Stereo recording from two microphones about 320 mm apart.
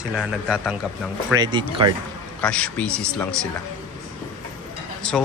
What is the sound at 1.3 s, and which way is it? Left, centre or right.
Speech, centre.